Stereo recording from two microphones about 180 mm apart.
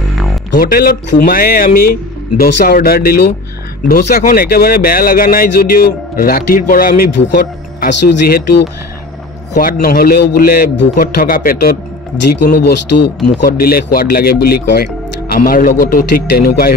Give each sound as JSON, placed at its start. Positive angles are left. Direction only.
{"t": 0.5, "sound": "a man's voice", "side_deg": 55}
{"t": 7.1, "sound": "speech", "side_deg": 80}
{"t": 8.1, "sound": "speech", "side_deg": 60}